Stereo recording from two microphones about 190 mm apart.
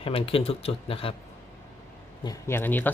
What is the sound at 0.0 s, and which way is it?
Speech, 30° left (ahead or behind).